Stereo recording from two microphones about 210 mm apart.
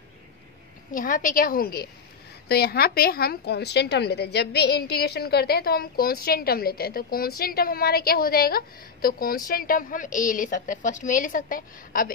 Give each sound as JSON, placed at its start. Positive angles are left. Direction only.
{"t": 0.9, "sound": "a woman's voice", "side_deg": 40}